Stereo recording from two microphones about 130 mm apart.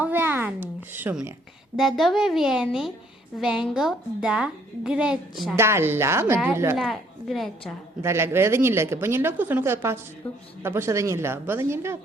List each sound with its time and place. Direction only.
0.0 s a sound: 15° right (ahead or behind)
1.7 s a woman's voice: centre (ahead or behind)
5.5 s speech: 20° right (ahead or behind)
6.7 s a woman's voice: centre (ahead or behind)
8.0 s speech: 20° right (ahead or behind)
10.2 s a man's voice: 10° left (ahead or behind)
10.6 s speech: 20° right (ahead or behind)